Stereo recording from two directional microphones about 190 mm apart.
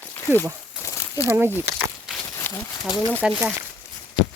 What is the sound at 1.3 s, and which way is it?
Speech, 10° right (ahead or behind).